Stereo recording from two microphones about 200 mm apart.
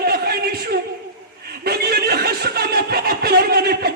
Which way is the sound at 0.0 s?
50° right (ahead or behind).